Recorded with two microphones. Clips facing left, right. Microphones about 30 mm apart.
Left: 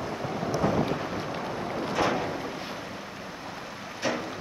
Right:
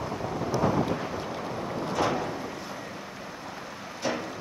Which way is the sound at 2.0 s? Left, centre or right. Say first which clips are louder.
Left 1 dB; centre.